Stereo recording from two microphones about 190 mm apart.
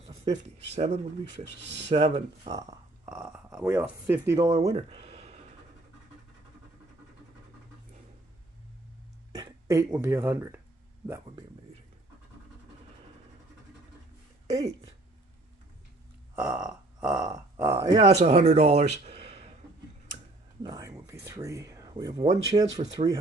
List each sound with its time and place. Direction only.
0.0 s speech: 30° right (ahead or behind)
2.5 s speech: 20° right (ahead or behind)
3.1 s speech: 5° right (ahead or behind); by 5.4 s 35° right (ahead or behind)
9.3 s speech: 20° right (ahead or behind)
16.3 s burping: 5° right (ahead or behind)
17.3 s speech: 15° right (ahead or behind)
17.9 s speech: 35° right (ahead or behind)
20.6 s speech: 20° right (ahead or behind)